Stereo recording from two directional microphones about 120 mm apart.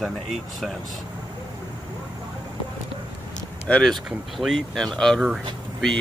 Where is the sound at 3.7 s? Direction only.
5° left (ahead or behind).